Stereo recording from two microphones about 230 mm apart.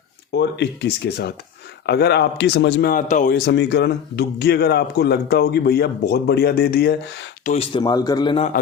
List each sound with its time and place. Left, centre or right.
0.3 s speech: left
7.4 s a man's voice: left